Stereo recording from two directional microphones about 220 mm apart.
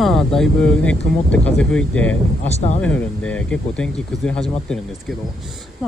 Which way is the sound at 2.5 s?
30° left (ahead or behind).